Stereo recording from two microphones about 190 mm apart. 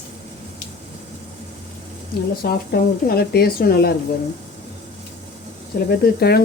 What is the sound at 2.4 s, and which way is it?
Speech, 55° left (ahead or behind).